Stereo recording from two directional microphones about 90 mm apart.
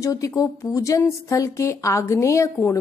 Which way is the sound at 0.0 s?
40° left (ahead or behind).